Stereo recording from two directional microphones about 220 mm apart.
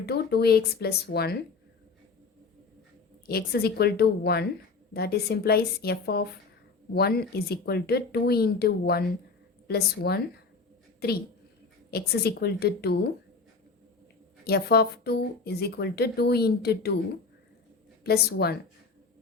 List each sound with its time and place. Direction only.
0.0 s speech: 45° left (ahead or behind)
3.2 s speech: 45° left (ahead or behind)
14.4 s speech: 45° left (ahead or behind)
18.0 s speech: 45° left (ahead or behind)